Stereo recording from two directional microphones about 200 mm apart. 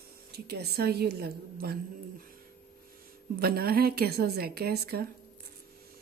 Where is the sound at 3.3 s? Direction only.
50° right (ahead or behind).